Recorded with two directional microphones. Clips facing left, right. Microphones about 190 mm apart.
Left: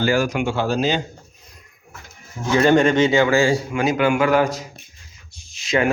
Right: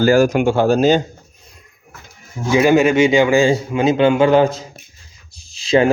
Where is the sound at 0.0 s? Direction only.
45° right (ahead or behind).